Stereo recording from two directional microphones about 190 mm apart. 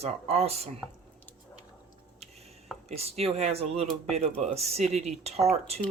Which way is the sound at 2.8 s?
35° right (ahead or behind).